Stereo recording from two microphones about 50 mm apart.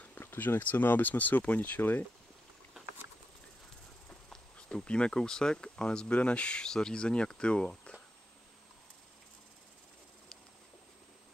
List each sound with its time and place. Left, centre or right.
0.4 s speech: left
1.8 s speech: left
4.6 s speech: centre